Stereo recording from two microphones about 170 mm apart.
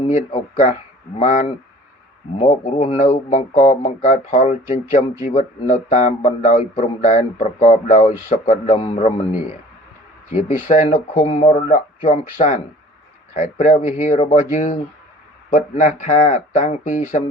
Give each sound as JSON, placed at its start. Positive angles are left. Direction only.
{"t": 0.1, "sound": "speech", "side_deg": 50}
{"t": 5.2, "sound": "a man's voice", "side_deg": 35}
{"t": 10.5, "sound": "a man's voice", "side_deg": 50}
{"t": 13.3, "sound": "a man's voice", "side_deg": 50}